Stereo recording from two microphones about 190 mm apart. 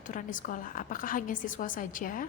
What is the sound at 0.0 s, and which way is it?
A woman's voice, 45° left (ahead or behind).